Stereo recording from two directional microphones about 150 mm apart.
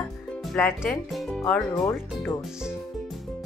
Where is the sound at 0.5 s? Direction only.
10° left (ahead or behind).